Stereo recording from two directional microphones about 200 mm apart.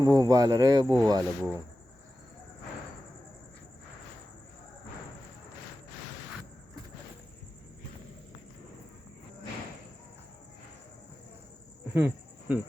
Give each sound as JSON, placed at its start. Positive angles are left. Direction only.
{"t": 0.0, "sound": "speech", "side_deg": -20}
{"t": 11.9, "sound": "cricket", "side_deg": -10}